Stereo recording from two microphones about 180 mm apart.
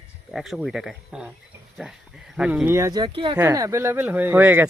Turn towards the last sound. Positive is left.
turn(degrees=-10)  # may be behind; listen again after turning